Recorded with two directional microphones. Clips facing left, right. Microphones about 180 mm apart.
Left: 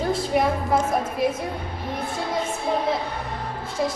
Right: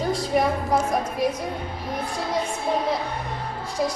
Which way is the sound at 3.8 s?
Centre (ahead or behind).